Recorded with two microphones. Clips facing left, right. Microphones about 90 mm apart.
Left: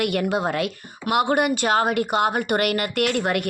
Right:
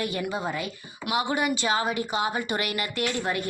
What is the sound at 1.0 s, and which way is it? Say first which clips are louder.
A woman's voice: left 6 dB; 55° left (ahead or behind).